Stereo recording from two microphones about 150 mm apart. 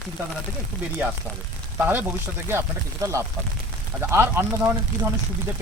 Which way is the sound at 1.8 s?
10° right (ahead or behind).